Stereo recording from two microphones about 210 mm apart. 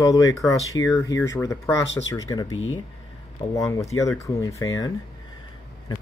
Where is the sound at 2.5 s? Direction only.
75° left (ahead or behind).